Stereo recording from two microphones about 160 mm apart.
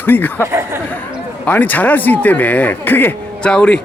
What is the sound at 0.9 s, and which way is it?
A man's voice, 10° left (ahead or behind).